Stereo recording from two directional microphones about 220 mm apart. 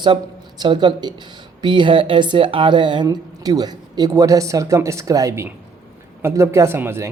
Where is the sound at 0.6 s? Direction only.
20° right (ahead or behind).